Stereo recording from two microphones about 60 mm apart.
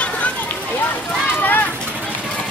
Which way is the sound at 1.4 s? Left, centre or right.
Left.